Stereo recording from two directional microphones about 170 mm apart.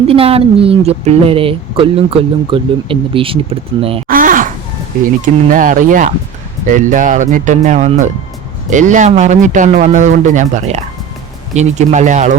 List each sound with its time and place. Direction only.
0.1 s a woman's voice: 35° right (ahead or behind)
4.1 s a sound: 55° right (ahead or behind)
5.0 s a man's voice: 50° right (ahead or behind)